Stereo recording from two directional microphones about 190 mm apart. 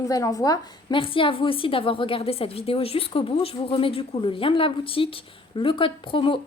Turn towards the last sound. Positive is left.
turn(degrees=25)  # may be behind; listen again after turning